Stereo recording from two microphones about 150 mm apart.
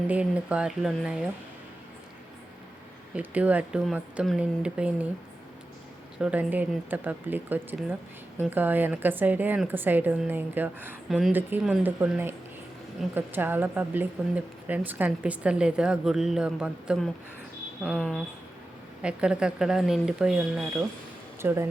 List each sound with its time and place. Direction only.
0.1 s speech: 10° right (ahead or behind)
3.2 s speech: 10° right (ahead or behind)
6.1 s speech: 10° right (ahead or behind)
21.4 s speech: 15° right (ahead or behind)